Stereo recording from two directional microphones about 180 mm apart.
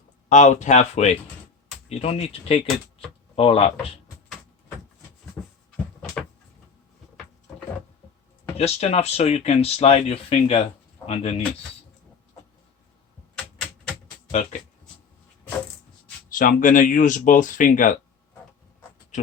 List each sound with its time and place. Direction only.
0.3 s speech: 40° left (ahead or behind)
5.7 s cupboard open or close: 5° left (ahead or behind)
8.5 s speech: 35° left (ahead or behind)
13.3 s typewriter: 5° left (ahead or behind)
16.3 s speech: 50° left (ahead or behind)